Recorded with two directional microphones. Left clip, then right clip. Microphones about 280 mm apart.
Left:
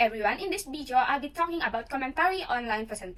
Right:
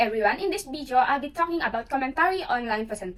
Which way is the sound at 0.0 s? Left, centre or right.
Centre.